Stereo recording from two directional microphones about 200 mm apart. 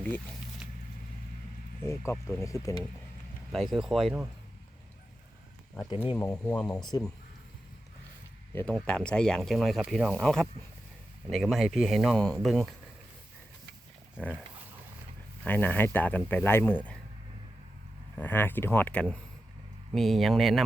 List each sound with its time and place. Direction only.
0.6 s squish: 5° right (ahead or behind)
1.8 s speech: 15° left (ahead or behind)
3.5 s speech: centre (ahead or behind)
6.1 s speech: 5° left (ahead or behind)
6.8 s speech: 20° left (ahead or behind)
8.5 s speech: 5° left (ahead or behind)
14.2 s speech: 5° left (ahead or behind)
15.4 s speech: 10° left (ahead or behind)
18.2 s speech: 10° left (ahead or behind)